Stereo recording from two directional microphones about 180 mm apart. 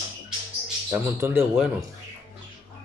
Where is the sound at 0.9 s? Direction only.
15° right (ahead or behind).